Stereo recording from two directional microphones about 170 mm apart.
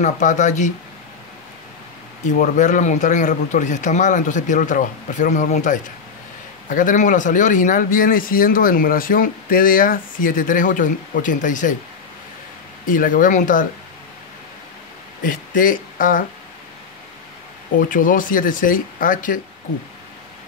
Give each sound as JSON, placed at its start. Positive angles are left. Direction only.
{"t": 0.0, "sound": "speech", "side_deg": 45}
{"t": 2.3, "sound": "speech", "side_deg": 50}
{"t": 12.8, "sound": "speech", "side_deg": 55}
{"t": 15.2, "sound": "speech", "side_deg": 55}
{"t": 17.7, "sound": "speech", "side_deg": 55}